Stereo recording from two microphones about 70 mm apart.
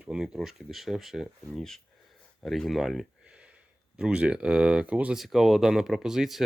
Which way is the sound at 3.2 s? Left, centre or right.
Centre.